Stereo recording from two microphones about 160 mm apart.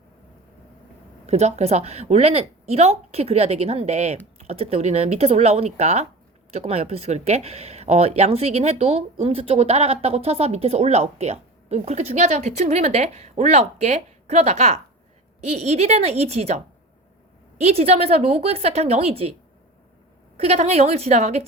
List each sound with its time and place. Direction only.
1.3 s speech: 45° right (ahead or behind)
17.6 s speech: 40° right (ahead or behind)
20.3 s speech: 40° right (ahead or behind)